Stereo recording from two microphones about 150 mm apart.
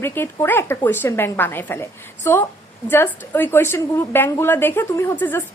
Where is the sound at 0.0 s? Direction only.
15° left (ahead or behind).